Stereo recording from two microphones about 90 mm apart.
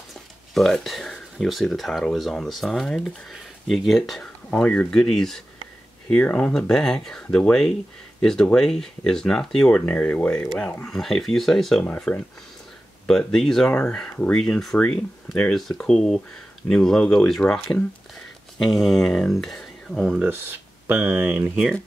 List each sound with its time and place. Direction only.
0.1 s speech: centre (ahead or behind)
4.5 s speech: 15° left (ahead or behind)
10.9 s speech: 5° left (ahead or behind)
11.8 s speech: 15° left (ahead or behind)
20.8 s speech: 25° right (ahead or behind)